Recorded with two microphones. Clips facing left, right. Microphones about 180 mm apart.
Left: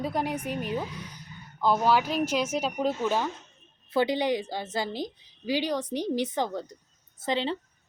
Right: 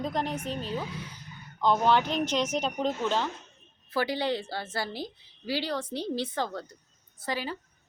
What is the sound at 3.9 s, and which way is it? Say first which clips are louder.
A woman's voice: left 4 dB; 20° left (ahead or behind).